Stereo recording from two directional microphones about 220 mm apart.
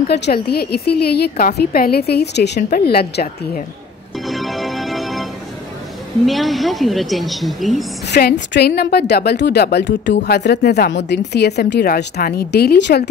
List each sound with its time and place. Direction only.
0.1 s a woman's voice: 45° left (ahead or behind)
4.3 s music: centre (ahead or behind)
6.2 s a woman's voice: centre (ahead or behind)
8.1 s a woman's voice: 45° left (ahead or behind)